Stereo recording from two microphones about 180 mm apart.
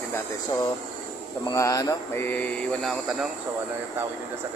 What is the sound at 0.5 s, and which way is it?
Speech, 20° left (ahead or behind).